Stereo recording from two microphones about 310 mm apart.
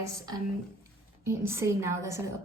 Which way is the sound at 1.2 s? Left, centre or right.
Centre.